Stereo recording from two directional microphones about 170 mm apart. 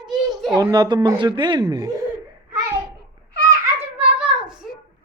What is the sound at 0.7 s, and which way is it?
Speech, 25° right (ahead or behind).